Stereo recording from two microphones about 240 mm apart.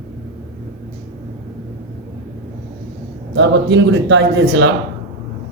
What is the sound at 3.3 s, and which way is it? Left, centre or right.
A man's voice, right.